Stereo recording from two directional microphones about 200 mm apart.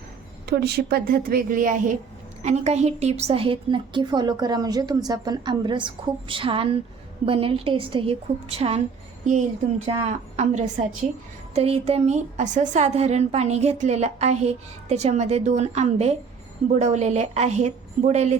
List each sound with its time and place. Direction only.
0.5 s a woman's voice: 55° right (ahead or behind); by 18.3 s 35° right (ahead or behind)